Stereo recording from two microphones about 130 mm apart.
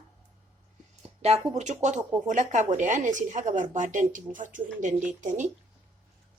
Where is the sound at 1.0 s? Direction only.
50° right (ahead or behind).